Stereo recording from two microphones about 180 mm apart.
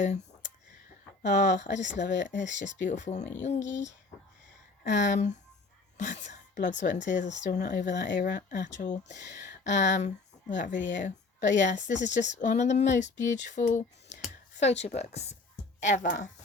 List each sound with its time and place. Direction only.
0.0 s a sound: 45° left (ahead or behind)
1.2 s a woman's voice: 45° left (ahead or behind)
4.8 s a woman's voice: 45° left (ahead or behind)
7.9 s speech: 80° left
8.1 s a woman's voice: 50° left (ahead or behind); by 8.8 s 70° left (ahead or behind)
9.3 s a woman's voice: 40° left (ahead or behind)